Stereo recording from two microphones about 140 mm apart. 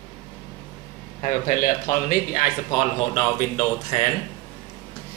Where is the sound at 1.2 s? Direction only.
75° left (ahead or behind).